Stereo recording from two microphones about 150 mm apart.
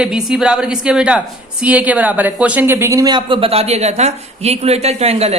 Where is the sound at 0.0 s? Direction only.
5° right (ahead or behind).